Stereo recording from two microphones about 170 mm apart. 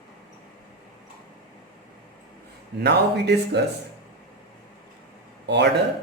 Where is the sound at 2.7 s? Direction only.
80° right.